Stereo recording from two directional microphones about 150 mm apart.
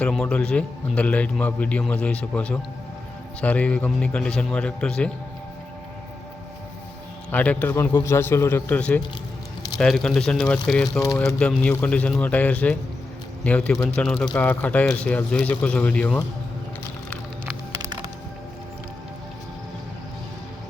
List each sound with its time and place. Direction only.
0.0 s a man's voice: 5° left (ahead or behind)
7.3 s a man's voice: 10° left (ahead or behind)
17.4 s music: 15° right (ahead or behind)